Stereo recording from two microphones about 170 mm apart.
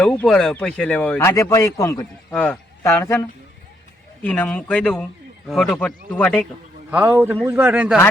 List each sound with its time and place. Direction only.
0.0 s speech: 5° left (ahead or behind)
2.3 s speech: 5° left (ahead or behind)
2.8 s a man's voice: 15° left (ahead or behind)
6.9 s a man's voice: 10° right (ahead or behind)